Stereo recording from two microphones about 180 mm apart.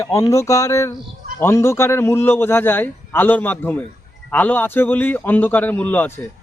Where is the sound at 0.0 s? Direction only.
15° left (ahead or behind).